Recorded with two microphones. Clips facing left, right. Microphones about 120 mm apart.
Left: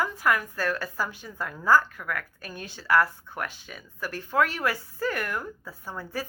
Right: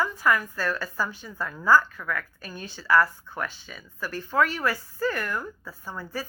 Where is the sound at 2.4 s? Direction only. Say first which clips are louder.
Right 1 dB; 55° left (ahead or behind).